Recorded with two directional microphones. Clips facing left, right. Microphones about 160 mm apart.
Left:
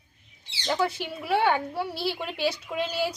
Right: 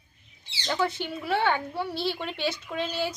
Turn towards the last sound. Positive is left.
turn(degrees=10)  # may be behind; listen again after turning